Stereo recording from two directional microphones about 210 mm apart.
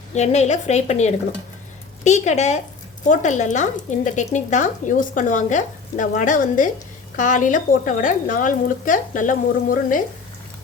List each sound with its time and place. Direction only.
0.1 s speech: 35° left (ahead or behind)